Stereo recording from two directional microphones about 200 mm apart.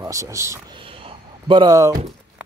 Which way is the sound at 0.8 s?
25° right (ahead or behind).